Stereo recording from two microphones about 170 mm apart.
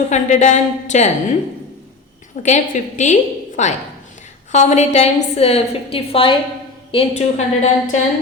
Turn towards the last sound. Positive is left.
turn(degrees=45)  # may be behind; listen again after turning